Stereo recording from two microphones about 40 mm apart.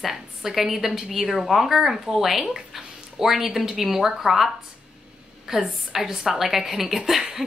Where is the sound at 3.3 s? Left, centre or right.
Centre.